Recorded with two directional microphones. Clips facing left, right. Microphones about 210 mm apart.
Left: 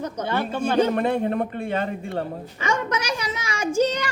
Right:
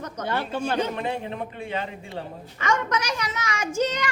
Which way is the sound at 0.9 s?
55° left (ahead or behind).